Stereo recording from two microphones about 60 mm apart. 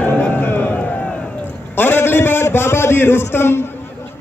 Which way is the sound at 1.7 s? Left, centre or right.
Left.